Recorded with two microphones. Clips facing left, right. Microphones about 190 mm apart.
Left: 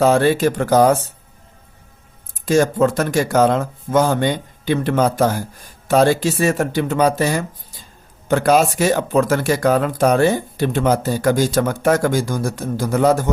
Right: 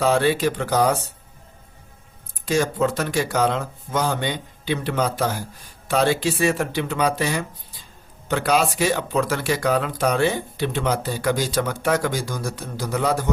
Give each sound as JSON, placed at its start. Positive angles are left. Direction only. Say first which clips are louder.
{"t": 0.0, "sound": "speech", "louder": "left 5 dB", "side_deg": 45}
{"t": 2.5, "sound": "speech", "louder": "left 6 dB", "side_deg": 50}